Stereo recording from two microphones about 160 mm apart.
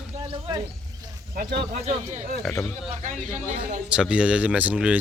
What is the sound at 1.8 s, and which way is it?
Speech, 50° right (ahead or behind).